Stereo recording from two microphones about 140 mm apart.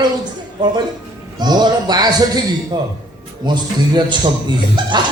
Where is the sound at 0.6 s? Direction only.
30° right (ahead or behind).